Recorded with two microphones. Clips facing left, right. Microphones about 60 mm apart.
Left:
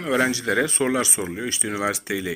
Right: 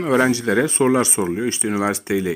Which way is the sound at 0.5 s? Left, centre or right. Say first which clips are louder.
Right 5 dB; right.